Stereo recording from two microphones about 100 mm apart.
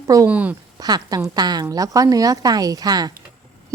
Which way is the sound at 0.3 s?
15° right (ahead or behind).